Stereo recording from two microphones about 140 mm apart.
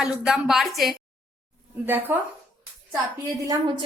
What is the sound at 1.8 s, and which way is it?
Speech, 15° right (ahead or behind).